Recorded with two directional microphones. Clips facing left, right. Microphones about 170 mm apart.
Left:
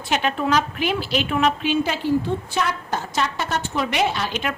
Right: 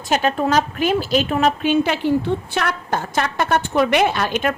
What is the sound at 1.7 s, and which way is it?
A woman's voice, 65° right (ahead or behind).